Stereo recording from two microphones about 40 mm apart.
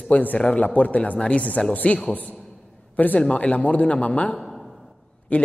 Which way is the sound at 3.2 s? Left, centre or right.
Left.